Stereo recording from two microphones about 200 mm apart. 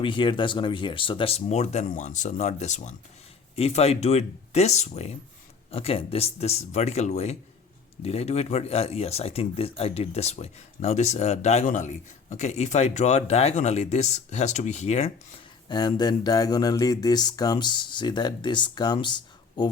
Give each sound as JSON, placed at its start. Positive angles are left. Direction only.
{"t": 0.0, "sound": "speech", "side_deg": 25}
{"t": 15.7, "sound": "speech", "side_deg": 20}